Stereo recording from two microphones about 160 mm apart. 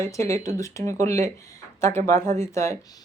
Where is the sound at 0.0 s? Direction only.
20° left (ahead or behind).